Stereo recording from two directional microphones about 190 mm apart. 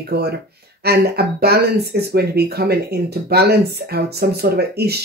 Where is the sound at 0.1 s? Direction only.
55° right (ahead or behind).